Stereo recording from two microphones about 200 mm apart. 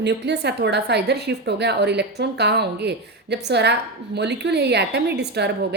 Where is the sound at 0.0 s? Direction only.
60° right (ahead or behind).